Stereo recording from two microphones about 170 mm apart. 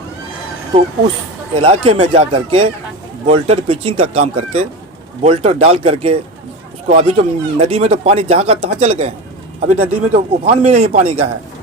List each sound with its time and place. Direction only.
1.5 s speech: 35° right (ahead or behind)